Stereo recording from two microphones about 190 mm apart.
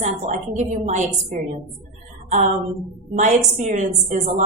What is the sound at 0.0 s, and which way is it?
A woman's voice, 40° right (ahead or behind).